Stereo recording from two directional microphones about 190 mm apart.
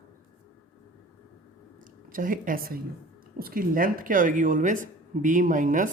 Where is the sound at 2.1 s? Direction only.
45° right (ahead or behind).